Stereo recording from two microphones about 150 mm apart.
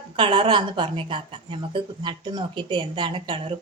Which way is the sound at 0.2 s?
35° right (ahead or behind).